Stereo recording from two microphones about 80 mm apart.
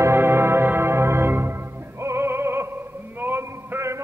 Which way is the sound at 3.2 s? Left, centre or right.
Right.